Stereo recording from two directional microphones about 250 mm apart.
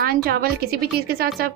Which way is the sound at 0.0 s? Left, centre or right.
Right.